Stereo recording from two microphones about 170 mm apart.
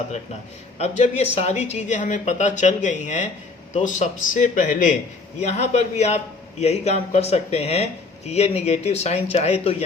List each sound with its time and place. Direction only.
0.8 s a man's voice: 40° left (ahead or behind)